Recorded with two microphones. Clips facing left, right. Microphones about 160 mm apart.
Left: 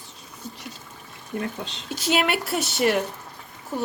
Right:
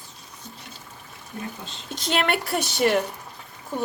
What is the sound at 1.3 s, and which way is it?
Speech, 70° left (ahead or behind).